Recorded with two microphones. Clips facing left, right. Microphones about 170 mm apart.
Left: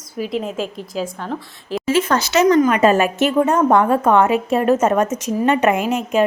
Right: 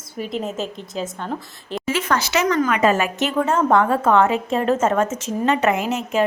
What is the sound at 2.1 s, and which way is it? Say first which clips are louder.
A woman's voice: left 5 dB; 20° left (ahead or behind).